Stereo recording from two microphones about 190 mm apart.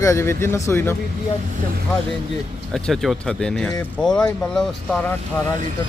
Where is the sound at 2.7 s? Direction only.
Centre (ahead or behind).